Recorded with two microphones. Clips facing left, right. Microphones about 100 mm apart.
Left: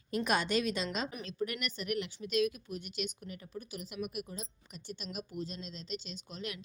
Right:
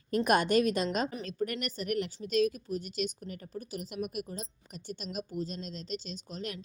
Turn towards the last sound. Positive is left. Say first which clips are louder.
# right 3 dB
turn(degrees=-40)  # may be behind; listen again after turning